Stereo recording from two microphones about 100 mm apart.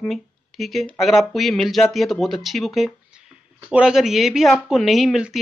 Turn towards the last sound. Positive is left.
turn(degrees=-5)  # may be behind; listen again after turning